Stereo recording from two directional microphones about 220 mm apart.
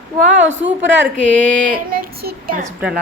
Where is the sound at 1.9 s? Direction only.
45° right (ahead or behind).